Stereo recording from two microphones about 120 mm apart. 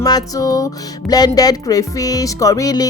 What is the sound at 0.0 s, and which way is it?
Music, 30° left (ahead or behind).